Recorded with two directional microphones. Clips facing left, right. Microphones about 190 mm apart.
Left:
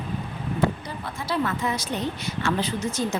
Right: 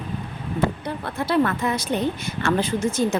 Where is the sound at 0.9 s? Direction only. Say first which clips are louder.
Right 5 dB; 60° right (ahead or behind).